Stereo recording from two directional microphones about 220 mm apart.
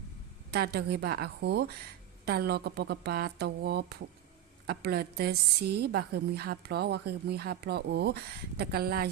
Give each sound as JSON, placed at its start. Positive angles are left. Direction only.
{"t": 0.5, "sound": "a woman's voice", "side_deg": -45}